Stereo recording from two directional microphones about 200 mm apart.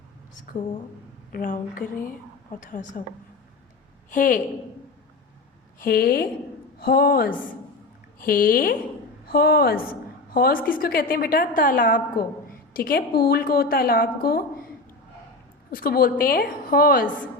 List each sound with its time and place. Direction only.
1.3 s a woman's voice: 40° left (ahead or behind)
4.1 s a woman's voice: 45° left (ahead or behind)
5.8 s a woman's voice: 50° left (ahead or behind)
15.7 s a woman's voice: 45° left (ahead or behind)